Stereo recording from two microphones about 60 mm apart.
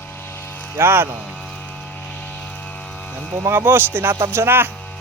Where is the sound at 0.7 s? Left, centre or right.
Right.